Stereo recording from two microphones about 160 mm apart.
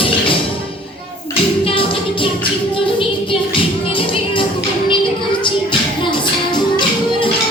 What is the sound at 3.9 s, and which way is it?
Music, 35° left (ahead or behind).